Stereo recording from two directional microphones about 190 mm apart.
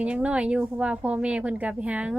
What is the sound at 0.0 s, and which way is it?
A woman's voice, 5° right (ahead or behind).